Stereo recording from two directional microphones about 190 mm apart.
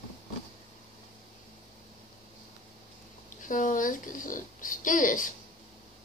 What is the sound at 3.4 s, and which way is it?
Speech, 45° left (ahead or behind).